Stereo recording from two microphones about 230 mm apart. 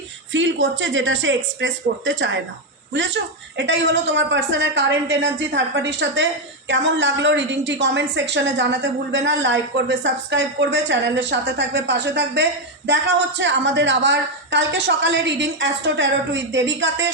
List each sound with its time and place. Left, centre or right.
0.3 s a woman's voice: right
3.6 s a woman's voice: right